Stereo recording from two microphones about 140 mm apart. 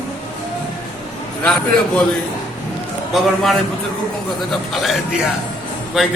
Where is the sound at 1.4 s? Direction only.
10° left (ahead or behind).